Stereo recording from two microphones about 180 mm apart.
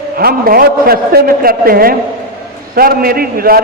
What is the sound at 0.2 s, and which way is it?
A man's voice, 55° right (ahead or behind).